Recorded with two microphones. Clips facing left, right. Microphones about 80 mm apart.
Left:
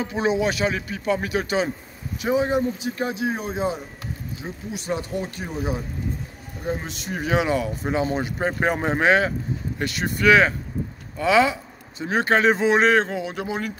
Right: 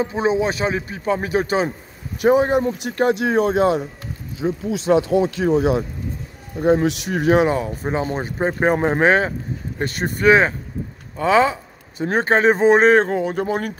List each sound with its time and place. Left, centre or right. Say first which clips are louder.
0.0 s speech: right 3 dB; right
2.2 s speech: right 6 dB; right
2.6 s speech: right 6 dB; right
6.6 s speech: right 12 dB; right
7.2 s speech: right 5 dB; right